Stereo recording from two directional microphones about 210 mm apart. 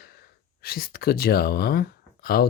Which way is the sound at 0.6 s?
45° left (ahead or behind).